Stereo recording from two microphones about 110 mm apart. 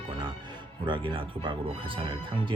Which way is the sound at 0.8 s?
45° right (ahead or behind).